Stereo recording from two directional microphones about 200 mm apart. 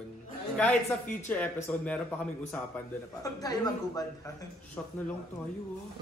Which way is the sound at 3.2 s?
20° left (ahead or behind).